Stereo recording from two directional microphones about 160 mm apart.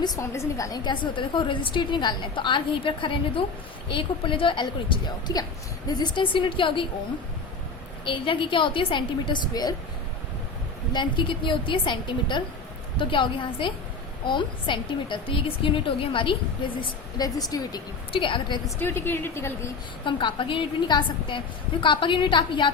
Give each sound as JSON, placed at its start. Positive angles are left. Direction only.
{"t": 0.0, "sound": "a woman's voice", "side_deg": 20}
{"t": 8.0, "sound": "a woman's voice", "side_deg": 30}
{"t": 10.9, "sound": "a woman's voice", "side_deg": 30}
{"t": 18.8, "sound": "a woman's voice", "side_deg": 15}
{"t": 20.1, "sound": "a woman's voice", "side_deg": 30}